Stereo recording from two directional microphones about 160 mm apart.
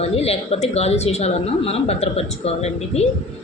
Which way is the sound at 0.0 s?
40° left (ahead or behind).